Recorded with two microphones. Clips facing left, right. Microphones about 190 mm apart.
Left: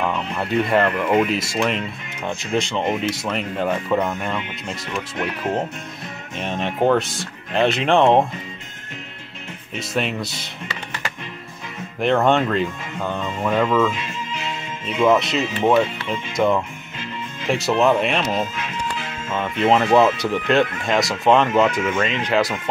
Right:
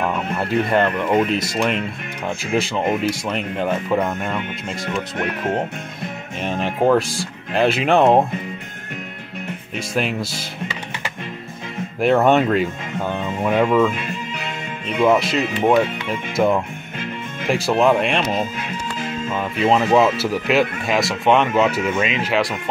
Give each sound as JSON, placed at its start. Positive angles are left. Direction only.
{"t": 0.0, "sound": "music", "side_deg": -5}
{"t": 0.7, "sound": "speech", "side_deg": 0}
{"t": 2.2, "sound": "speech", "side_deg": -5}
{"t": 6.4, "sound": "speech", "side_deg": -5}
{"t": 10.0, "sound": "speech", "side_deg": -5}
{"t": 12.0, "sound": "speech", "side_deg": -5}
{"t": 13.9, "sound": "music", "side_deg": -55}
{"t": 15.0, "sound": "speech", "side_deg": -5}
{"t": 19.3, "sound": "speech", "side_deg": -5}